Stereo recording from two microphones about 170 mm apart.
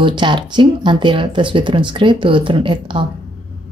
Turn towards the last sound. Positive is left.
turn(degrees=-30)  # may be behind; listen again after turning